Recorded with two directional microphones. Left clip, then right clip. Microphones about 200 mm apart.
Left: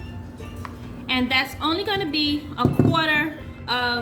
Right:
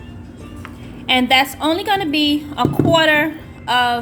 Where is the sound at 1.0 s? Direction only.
40° right (ahead or behind).